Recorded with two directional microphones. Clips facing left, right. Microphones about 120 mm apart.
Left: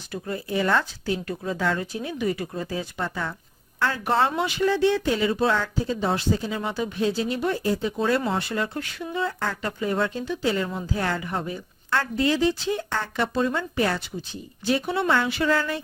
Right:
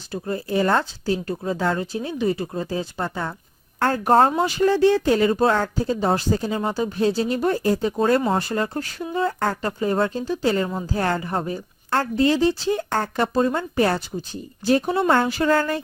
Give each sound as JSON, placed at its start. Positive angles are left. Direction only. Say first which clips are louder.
{"t": 0.1, "sound": "speech", "louder": "right 4 dB", "side_deg": -35}
{"t": 3.8, "sound": "speech", "louder": "right 6 dB", "side_deg": -45}